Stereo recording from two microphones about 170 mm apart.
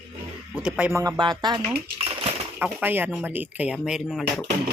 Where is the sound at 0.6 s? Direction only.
5° right (ahead or behind).